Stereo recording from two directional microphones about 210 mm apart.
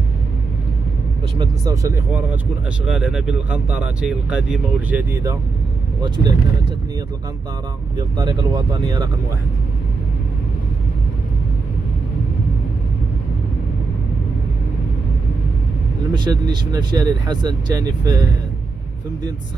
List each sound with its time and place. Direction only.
1.4 s speech: 15° right (ahead or behind)
5.9 s speech: 20° right (ahead or behind)
8.8 s speech: 20° right (ahead or behind)
16.1 s speech: 20° right (ahead or behind)